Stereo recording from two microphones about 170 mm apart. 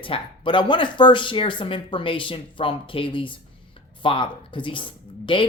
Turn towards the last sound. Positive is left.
turn(degrees=30)  # may be behind; listen again after turning